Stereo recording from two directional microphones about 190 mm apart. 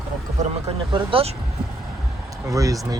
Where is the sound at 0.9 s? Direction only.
30° right (ahead or behind).